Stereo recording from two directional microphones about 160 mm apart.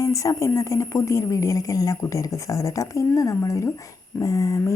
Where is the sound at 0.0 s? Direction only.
20° left (ahead or behind).